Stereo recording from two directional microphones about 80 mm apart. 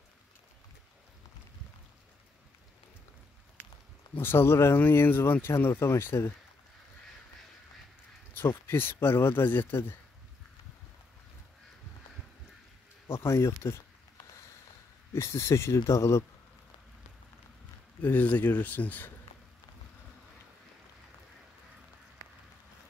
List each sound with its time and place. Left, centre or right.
4.2 s speech: left
8.4 s speech: left
13.1 s speech: left
15.1 s speech: left
18.0 s speech: left